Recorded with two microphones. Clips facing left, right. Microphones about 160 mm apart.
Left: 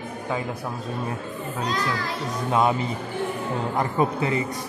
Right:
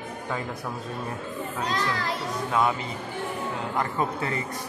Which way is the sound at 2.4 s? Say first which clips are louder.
Left 3 dB; 25° left (ahead or behind).